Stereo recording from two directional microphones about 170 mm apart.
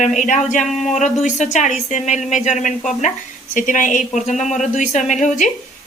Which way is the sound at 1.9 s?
45° left (ahead or behind).